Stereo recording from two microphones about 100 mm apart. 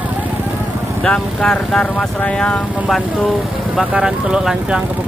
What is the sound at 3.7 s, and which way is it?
Speech, 5° right (ahead or behind).